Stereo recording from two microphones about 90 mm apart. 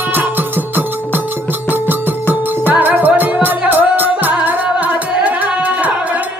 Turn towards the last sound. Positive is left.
turn(degrees=-15)  # may be behind; listen again after turning